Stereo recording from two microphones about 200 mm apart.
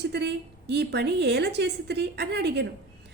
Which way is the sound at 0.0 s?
55° right (ahead or behind).